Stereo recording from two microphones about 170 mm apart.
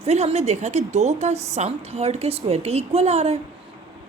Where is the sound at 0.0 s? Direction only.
40° right (ahead or behind).